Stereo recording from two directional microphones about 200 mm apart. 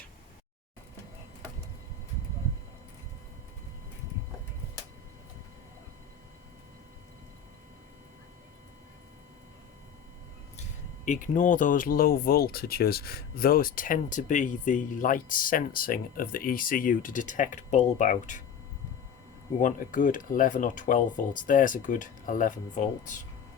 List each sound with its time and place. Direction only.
10.6 s speech: 40° left (ahead or behind)
19.5 s speech: 40° left (ahead or behind)